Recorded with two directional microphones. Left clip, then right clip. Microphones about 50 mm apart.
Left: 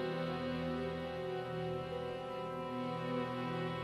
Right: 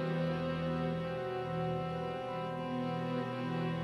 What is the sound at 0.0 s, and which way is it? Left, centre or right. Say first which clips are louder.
Music: right 2 dB; centre.